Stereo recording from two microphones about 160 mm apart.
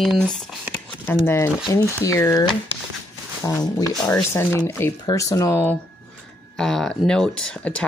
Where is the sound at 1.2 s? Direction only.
15° left (ahead or behind).